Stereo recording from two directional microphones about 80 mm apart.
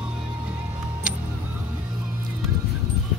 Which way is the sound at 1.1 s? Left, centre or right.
Centre.